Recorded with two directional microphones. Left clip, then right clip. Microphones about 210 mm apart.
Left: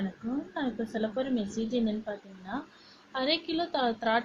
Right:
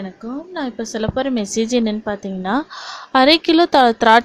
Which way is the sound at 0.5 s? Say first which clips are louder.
Right 12 dB; 45° right (ahead or behind).